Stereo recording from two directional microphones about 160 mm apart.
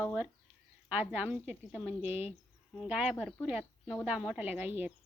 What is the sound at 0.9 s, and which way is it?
A woman's voice, 10° right (ahead or behind).